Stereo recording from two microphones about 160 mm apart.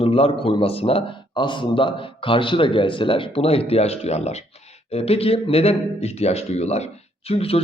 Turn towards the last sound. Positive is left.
turn(degrees=40)  # may be behind; listen again after turning